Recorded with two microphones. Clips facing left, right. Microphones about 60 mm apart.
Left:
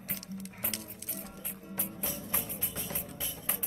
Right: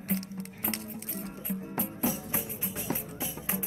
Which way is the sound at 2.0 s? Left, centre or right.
Right.